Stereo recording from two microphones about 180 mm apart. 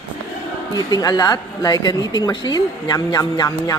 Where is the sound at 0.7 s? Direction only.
20° left (ahead or behind).